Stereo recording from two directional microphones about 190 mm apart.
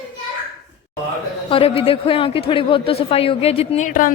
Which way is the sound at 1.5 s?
30° left (ahead or behind).